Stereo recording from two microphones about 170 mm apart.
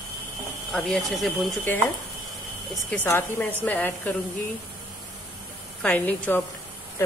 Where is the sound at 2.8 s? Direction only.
10° left (ahead or behind).